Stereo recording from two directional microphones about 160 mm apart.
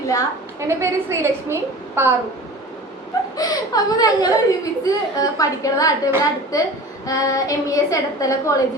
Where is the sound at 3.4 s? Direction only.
25° left (ahead or behind).